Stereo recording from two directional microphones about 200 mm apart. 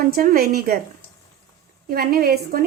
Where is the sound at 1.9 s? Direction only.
50° right (ahead or behind).